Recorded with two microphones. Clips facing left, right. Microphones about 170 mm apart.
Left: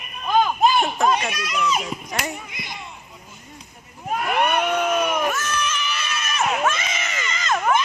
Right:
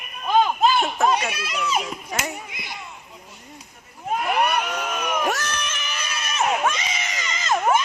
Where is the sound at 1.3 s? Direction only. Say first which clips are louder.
Left 2 dB; 25° right (ahead or behind).